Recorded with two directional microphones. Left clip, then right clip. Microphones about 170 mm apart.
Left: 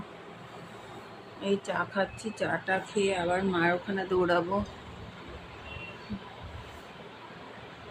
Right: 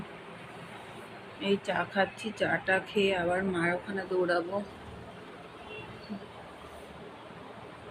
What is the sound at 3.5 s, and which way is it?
Speech, 25° left (ahead or behind).